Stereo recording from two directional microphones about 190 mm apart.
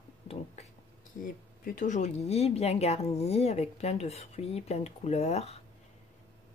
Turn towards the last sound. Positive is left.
turn(degrees=35)  # may be behind; listen again after turning